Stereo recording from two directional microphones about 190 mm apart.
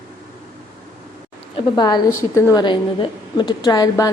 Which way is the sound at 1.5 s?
25° left (ahead or behind).